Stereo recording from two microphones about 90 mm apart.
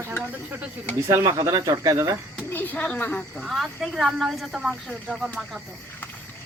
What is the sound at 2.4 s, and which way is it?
Speech, 20° left (ahead or behind).